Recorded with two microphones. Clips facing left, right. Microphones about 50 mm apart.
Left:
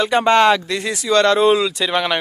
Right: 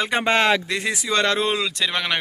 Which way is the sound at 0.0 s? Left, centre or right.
Centre.